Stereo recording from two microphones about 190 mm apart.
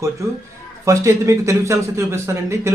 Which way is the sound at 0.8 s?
15° right (ahead or behind).